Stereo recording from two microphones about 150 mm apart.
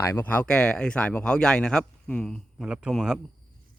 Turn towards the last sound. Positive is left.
turn(degrees=0)  # may be behind; listen again after turning